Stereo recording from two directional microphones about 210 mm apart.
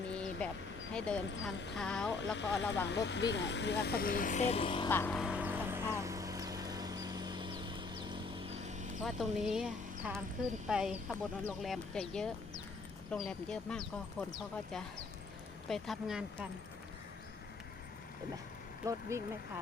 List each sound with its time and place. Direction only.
0.1 s vehicle: 5° left (ahead or behind)
0.9 s speech: 5° left (ahead or behind)
2.3 s speech: 60° left (ahead or behind); by 4.9 s 25° left (ahead or behind)
4.9 s speech: 10° left (ahead or behind)
5.1 s vehicle: 5° right (ahead or behind); by 8.9 s 30° right (ahead or behind)
9.0 s speech: centre (ahead or behind)
18.9 s speech: 15° right (ahead or behind)